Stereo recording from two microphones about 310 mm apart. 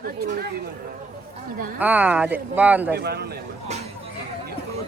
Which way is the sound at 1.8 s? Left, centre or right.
Centre.